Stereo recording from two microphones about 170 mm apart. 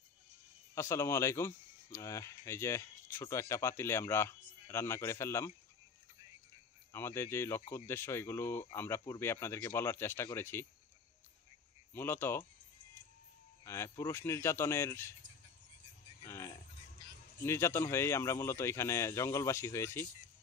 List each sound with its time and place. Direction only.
0.7 s speech: 15° left (ahead or behind)
6.9 s speech: 15° left (ahead or behind)
11.9 s speech: 15° left (ahead or behind)
13.7 s speech: 15° left (ahead or behind)
16.2 s a sound: 15° left (ahead or behind)
17.4 s speech: 15° left (ahead or behind)